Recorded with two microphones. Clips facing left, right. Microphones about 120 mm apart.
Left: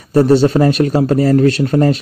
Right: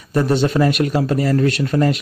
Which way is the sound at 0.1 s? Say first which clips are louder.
Left 7 dB; 35° left (ahead or behind).